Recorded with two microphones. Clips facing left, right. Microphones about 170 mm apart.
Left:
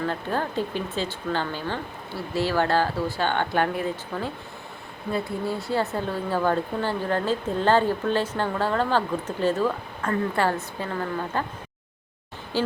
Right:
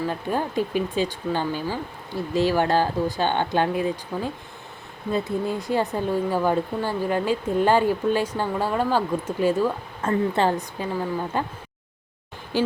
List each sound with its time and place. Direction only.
0.0 s speech: 15° right (ahead or behind)
10.0 s speech: 25° right (ahead or behind)
12.5 s speech: 15° right (ahead or behind)